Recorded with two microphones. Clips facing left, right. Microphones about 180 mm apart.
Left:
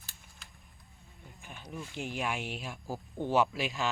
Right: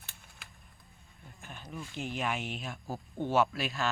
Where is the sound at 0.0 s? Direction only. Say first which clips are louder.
Right 2 dB; 65° right (ahead or behind).